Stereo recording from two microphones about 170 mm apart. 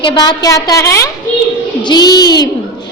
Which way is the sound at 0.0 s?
25° left (ahead or behind).